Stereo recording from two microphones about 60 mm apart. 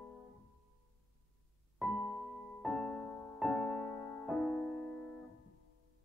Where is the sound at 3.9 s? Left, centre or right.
Centre.